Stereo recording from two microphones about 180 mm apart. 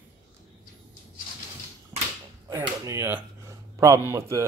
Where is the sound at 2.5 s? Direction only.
15° right (ahead or behind).